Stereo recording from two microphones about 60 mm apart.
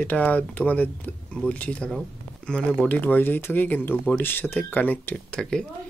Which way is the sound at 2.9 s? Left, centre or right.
Left.